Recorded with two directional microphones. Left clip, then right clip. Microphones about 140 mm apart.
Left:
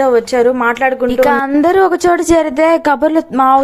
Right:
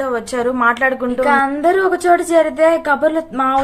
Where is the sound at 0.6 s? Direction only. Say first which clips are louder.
Left 2 dB; 25° left (ahead or behind).